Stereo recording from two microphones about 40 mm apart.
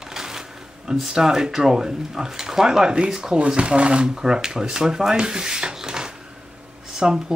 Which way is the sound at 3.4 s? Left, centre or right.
Right.